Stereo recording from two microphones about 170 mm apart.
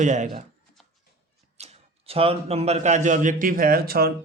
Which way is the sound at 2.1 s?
35° right (ahead or behind).